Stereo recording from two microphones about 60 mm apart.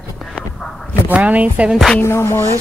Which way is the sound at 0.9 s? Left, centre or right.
Right.